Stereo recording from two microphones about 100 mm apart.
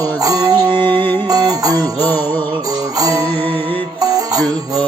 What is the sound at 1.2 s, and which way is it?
Music, 40° right (ahead or behind).